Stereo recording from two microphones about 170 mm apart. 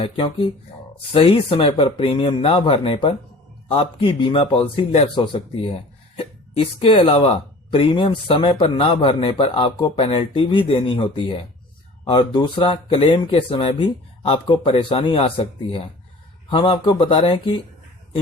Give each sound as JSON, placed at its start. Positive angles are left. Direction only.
{"t": 0.0, "sound": "speech", "side_deg": 30}